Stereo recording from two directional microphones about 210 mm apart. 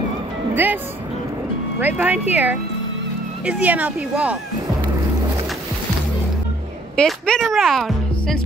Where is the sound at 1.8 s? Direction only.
10° right (ahead or behind).